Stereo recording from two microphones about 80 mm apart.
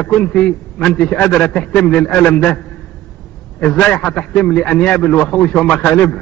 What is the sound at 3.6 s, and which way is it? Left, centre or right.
A man's voice, centre.